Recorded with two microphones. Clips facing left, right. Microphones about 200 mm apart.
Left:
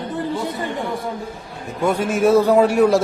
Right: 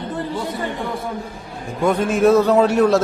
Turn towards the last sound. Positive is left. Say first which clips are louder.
# even
turn(degrees=10)  # may be behind; listen again after turning